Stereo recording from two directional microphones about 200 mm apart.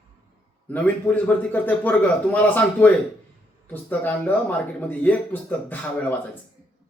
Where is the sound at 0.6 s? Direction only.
10° left (ahead or behind).